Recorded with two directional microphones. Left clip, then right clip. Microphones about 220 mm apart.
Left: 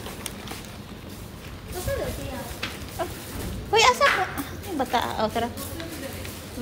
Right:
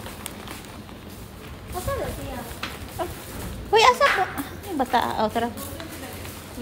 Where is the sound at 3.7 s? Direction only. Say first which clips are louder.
Right 2 dB; 20° right (ahead or behind).